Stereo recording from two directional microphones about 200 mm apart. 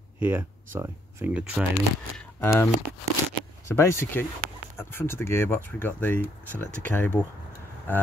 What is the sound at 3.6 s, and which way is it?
Speech, 15° left (ahead or behind).